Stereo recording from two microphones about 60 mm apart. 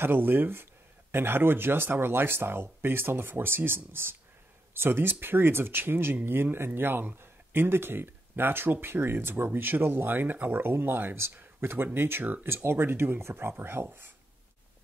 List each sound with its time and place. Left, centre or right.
0.0 s speech: right